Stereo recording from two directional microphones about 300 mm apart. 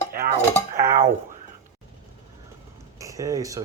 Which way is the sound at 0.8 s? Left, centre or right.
Right.